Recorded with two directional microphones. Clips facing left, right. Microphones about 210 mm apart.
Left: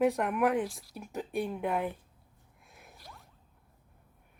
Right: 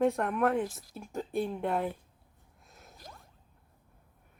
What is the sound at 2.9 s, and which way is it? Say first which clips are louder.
Whoosh: right 3 dB; 45° right (ahead or behind).